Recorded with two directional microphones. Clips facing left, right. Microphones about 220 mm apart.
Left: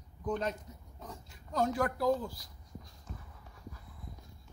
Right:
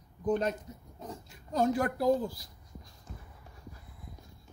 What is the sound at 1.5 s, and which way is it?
Speech, 30° right (ahead or behind).